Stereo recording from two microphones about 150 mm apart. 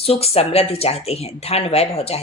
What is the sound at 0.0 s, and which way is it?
Speech, 40° left (ahead or behind).